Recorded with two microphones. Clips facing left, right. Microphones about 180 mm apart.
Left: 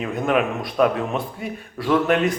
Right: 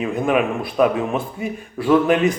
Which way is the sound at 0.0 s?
5° right (ahead or behind).